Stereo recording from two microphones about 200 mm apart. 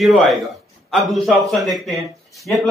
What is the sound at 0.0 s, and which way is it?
A man's voice, centre (ahead or behind).